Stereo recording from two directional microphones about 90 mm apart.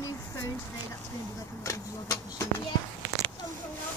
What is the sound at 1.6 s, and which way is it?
Speech, 40° left (ahead or behind).